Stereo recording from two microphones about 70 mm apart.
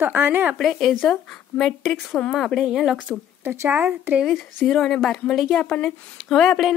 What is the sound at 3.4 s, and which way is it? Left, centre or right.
Speech, right.